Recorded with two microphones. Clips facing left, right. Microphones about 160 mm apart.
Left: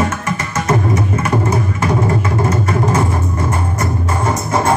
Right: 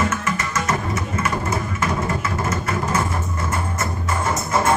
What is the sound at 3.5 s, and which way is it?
Music, 35° left (ahead or behind).